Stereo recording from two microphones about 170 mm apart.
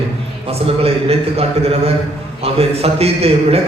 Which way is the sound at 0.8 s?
35° right (ahead or behind).